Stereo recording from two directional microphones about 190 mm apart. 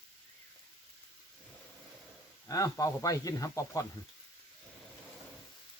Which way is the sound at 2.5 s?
20° left (ahead or behind).